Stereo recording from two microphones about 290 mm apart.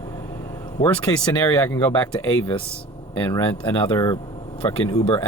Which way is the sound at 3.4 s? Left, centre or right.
Centre.